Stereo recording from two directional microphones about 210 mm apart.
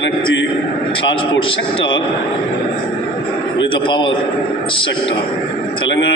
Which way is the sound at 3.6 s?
25° left (ahead or behind).